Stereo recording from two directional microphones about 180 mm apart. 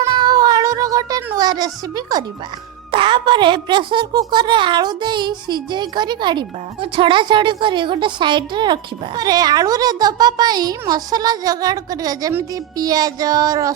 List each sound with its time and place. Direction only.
0.1 s cat: 25° right (ahead or behind)
2.9 s a woman's voice: 25° right (ahead or behind)